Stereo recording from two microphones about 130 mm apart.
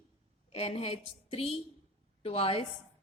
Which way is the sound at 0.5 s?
55° left (ahead or behind).